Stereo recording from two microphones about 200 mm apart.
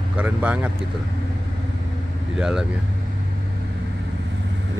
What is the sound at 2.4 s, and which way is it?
Speech, 5° right (ahead or behind).